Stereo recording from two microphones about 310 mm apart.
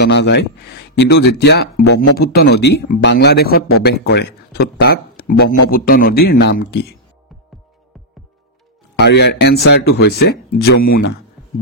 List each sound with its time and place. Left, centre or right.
0.0 s speech: left
8.9 s speech: left